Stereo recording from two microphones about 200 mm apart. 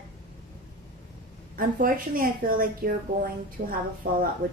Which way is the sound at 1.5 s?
45° right (ahead or behind).